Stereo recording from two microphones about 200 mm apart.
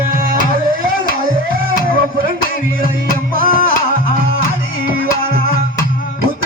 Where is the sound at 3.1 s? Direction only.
45° left (ahead or behind).